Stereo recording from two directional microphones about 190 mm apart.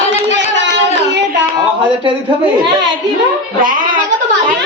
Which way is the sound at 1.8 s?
25° right (ahead or behind).